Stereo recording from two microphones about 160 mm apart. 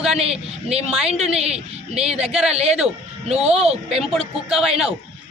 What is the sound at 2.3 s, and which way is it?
Speech, centre (ahead or behind).